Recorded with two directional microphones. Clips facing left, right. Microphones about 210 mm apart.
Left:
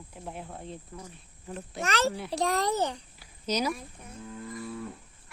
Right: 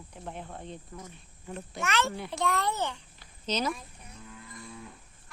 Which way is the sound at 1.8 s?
35° left (ahead or behind).